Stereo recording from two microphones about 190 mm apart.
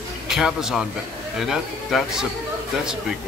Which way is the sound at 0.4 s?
Centre (ahead or behind).